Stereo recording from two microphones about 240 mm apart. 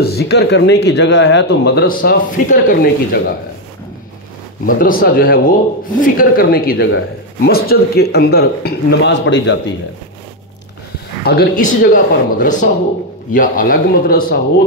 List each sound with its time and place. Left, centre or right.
0.0 s speech: left
4.6 s speech: left
11.2 s speech: left